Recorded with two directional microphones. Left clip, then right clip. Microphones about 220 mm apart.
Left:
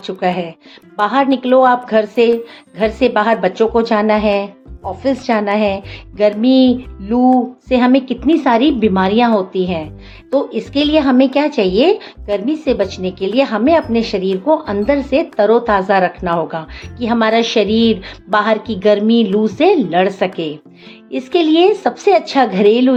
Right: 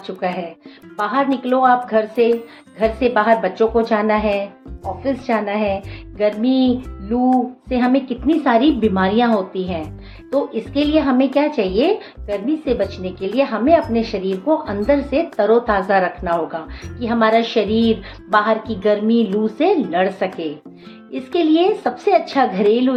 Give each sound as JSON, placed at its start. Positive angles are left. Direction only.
{"t": 0.0, "sound": "speech", "side_deg": 40}